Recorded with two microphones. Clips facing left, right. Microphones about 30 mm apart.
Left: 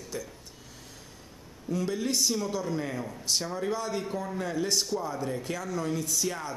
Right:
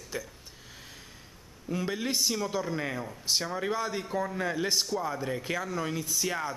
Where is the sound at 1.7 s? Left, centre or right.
Right.